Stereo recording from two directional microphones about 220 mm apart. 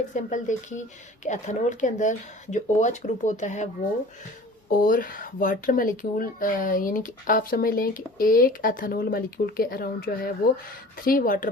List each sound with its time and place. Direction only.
0.1 s speech: 35° left (ahead or behind)
4.7 s speech: 40° left (ahead or behind)